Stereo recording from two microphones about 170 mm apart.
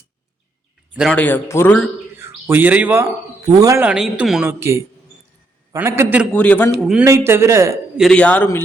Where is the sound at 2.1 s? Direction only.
10° right (ahead or behind).